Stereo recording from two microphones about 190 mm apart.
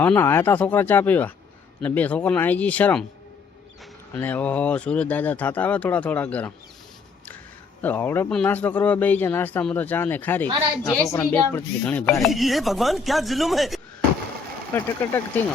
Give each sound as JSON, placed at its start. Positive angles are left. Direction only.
{"t": 0.0, "sound": "speech", "side_deg": 10}
{"t": 4.1, "sound": "speech", "side_deg": 10}
{"t": 7.8, "sound": "speech", "side_deg": 10}